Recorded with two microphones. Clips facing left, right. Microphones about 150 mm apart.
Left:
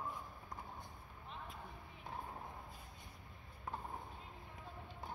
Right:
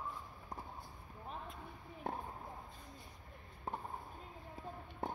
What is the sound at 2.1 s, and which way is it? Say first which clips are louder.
Basketball bounce: right 6 dB; 60° right (ahead or behind).